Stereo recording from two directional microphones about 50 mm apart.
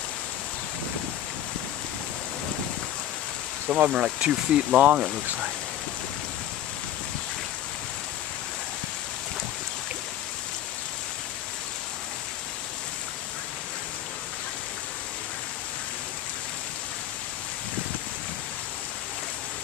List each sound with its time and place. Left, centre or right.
3.6 s speech: right
4.0 s speech: centre